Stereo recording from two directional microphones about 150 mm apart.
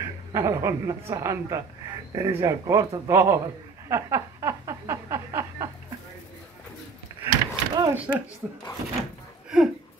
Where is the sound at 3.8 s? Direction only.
20° right (ahead or behind).